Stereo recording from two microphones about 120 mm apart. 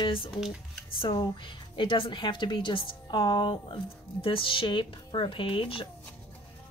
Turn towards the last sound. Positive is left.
turn(degrees=50)  # may be behind; listen again after turning